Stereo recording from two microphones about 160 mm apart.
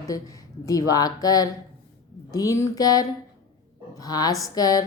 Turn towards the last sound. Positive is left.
turn(degrees=25)  # may be behind; listen again after turning